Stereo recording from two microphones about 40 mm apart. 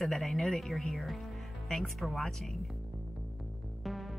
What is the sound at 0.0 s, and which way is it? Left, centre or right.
Speech, centre.